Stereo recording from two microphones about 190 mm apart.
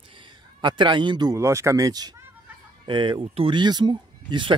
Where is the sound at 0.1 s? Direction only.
25° right (ahead or behind).